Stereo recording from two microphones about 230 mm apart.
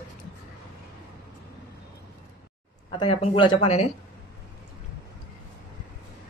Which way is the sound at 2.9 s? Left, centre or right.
Left.